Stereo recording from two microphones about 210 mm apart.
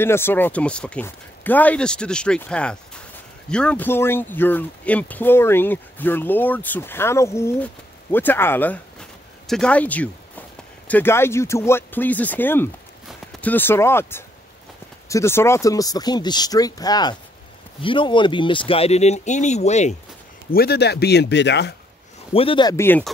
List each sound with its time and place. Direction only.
0.0 s speech: 10° left (ahead or behind); by 20.0 s 35° left (ahead or behind)
20.5 s speech: 50° left (ahead or behind)
22.3 s speech: 25° left (ahead or behind); by 23.0 s 10° left (ahead or behind)